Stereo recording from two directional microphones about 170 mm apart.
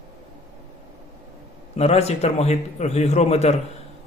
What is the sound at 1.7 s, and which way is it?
A man's voice, 40° left (ahead or behind).